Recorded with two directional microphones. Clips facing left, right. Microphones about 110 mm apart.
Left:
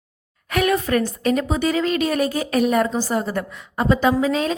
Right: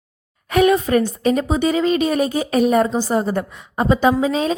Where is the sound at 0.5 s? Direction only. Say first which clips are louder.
Right 4 dB; 20° right (ahead or behind).